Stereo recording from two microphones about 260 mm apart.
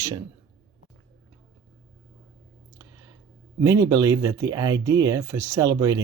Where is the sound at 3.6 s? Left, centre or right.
Centre.